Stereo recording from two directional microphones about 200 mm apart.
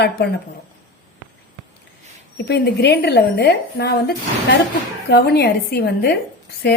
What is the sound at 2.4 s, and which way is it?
A woman's voice, 55° left (ahead or behind).